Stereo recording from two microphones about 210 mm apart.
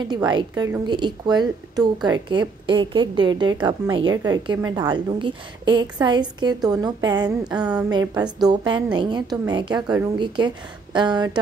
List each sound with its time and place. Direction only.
0.0 s a woman's voice: 20° right (ahead or behind)